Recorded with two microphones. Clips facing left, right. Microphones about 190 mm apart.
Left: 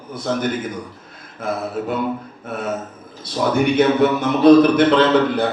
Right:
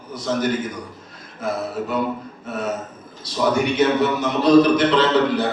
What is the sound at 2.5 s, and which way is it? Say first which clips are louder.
Speech: even; 55° left (ahead or behind).